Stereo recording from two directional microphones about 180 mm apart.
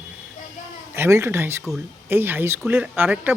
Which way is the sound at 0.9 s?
15° right (ahead or behind).